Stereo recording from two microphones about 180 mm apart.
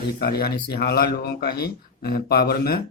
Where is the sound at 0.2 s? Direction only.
60° left (ahead or behind).